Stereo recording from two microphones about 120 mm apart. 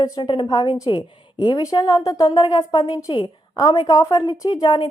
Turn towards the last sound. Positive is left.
turn(degrees=45)  # may be behind; listen again after turning